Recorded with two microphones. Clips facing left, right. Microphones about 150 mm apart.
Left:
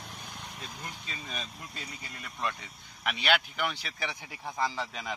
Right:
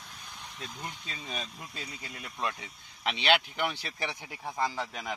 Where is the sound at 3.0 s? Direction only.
25° right (ahead or behind).